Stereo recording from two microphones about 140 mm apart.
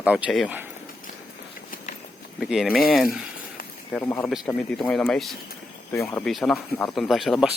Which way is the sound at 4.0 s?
20° left (ahead or behind).